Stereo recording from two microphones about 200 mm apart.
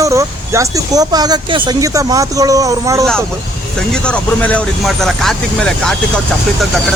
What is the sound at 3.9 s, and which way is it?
Speech, 5° left (ahead or behind).